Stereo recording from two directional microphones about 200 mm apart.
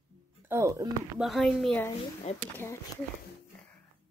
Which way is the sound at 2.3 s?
30° left (ahead or behind).